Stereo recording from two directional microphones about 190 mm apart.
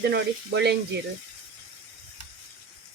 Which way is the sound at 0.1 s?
60° right (ahead or behind).